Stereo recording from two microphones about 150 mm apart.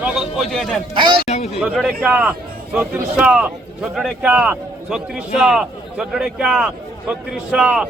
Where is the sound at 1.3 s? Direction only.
45° left (ahead or behind).